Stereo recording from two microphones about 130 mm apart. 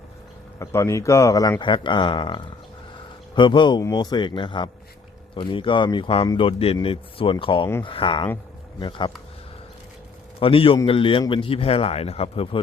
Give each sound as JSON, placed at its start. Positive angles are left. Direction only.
{"t": 0.6, "sound": "a man's voice", "side_deg": 20}
{"t": 10.4, "sound": "a man's voice", "side_deg": 45}